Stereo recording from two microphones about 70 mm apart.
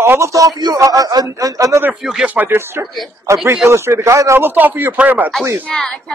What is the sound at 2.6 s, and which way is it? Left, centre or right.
Speech, right.